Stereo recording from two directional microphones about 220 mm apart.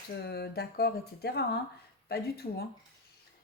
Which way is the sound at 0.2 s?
45° left (ahead or behind).